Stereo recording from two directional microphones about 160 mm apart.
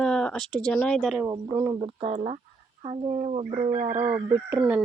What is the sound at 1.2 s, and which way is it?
Speech, 20° right (ahead or behind).